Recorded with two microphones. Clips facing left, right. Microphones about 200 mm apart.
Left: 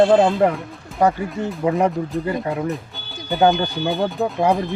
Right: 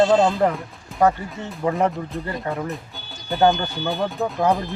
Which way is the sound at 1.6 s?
5° left (ahead or behind).